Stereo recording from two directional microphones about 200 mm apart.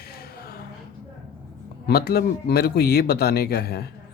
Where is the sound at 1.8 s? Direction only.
50° left (ahead or behind).